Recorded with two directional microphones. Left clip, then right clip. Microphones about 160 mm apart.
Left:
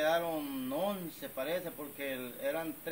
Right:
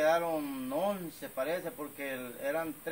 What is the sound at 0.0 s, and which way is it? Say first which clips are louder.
Speech: right 3 dB; 15° right (ahead or behind).